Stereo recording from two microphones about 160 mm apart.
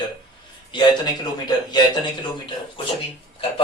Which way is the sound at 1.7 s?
30° left (ahead or behind).